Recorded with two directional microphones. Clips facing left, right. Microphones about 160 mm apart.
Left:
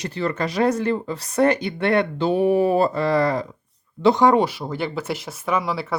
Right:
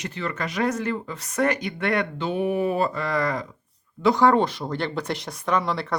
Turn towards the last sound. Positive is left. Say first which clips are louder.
# left 1 dB
turn(degrees=5)  # may be behind; listen again after turning